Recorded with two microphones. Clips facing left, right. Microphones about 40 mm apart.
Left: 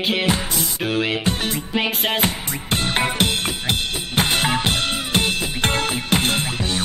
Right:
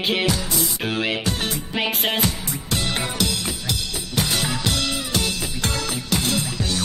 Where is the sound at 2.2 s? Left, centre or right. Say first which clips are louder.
Left 2 dB; left.